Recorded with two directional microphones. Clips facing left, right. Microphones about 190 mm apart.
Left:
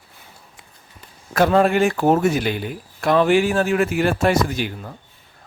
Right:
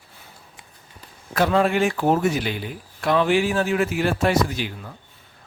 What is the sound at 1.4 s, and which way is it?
A man's voice, 45° left (ahead or behind).